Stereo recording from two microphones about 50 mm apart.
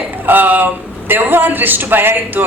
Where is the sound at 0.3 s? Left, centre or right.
Right.